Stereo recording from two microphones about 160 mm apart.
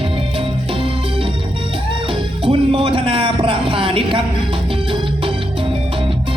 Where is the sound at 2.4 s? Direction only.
35° right (ahead or behind).